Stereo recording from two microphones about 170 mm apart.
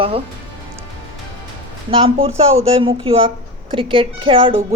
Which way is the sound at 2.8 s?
30° right (ahead or behind).